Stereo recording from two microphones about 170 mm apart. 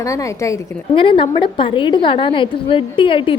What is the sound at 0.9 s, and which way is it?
A woman's voice, 30° left (ahead or behind).